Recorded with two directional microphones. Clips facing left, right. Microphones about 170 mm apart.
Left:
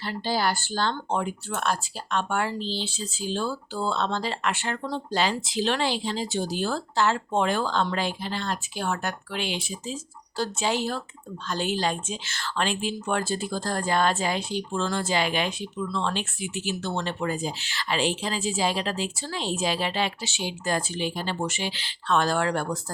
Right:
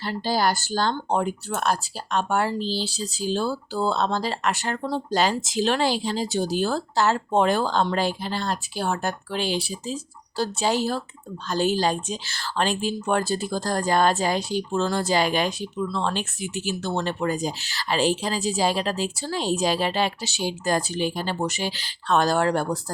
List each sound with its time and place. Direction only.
0.0 s speech: 40° right (ahead or behind)